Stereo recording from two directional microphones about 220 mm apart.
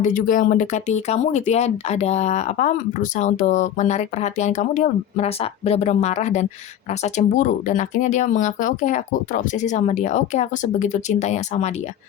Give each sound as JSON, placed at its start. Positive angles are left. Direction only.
{"t": 0.0, "sound": "speech", "side_deg": 35}